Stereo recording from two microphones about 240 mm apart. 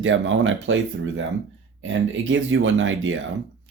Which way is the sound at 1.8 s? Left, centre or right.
Right.